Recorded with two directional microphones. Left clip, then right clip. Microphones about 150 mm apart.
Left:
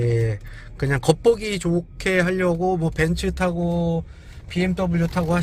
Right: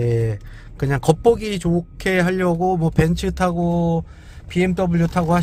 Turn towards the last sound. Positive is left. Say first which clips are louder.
# right 4 dB
turn(degrees=-35)  # may be behind; listen again after turning